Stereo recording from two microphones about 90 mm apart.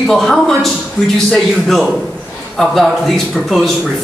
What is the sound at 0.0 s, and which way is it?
Speech, 5° left (ahead or behind).